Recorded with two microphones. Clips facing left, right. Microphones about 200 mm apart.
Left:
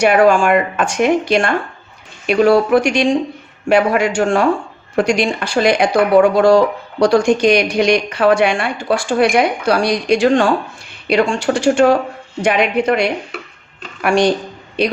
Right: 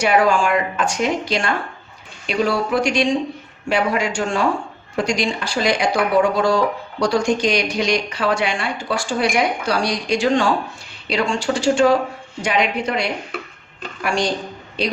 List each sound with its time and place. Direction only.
0.0 s a woman's voice: 55° left (ahead or behind)